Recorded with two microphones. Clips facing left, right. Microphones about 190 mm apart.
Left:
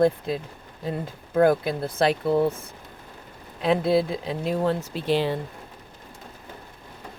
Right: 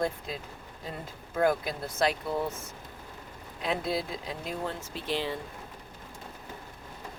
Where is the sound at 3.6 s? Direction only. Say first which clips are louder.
Left 10 dB; 60° left (ahead or behind).